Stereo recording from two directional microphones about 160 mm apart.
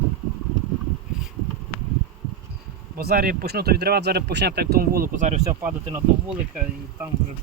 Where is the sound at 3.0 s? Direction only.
70° right (ahead or behind); by 5.4 s 50° right (ahead or behind).